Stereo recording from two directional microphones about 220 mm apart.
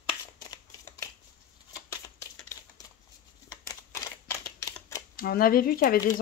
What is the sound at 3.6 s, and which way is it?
Camera, 15° left (ahead or behind).